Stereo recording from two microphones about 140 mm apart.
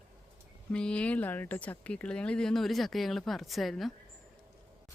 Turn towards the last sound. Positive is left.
turn(degrees=0)  # may be behind; listen again after turning